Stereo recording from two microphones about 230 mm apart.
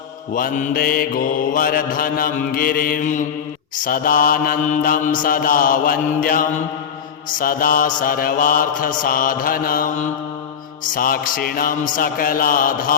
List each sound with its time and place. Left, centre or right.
0.3 s mantra: left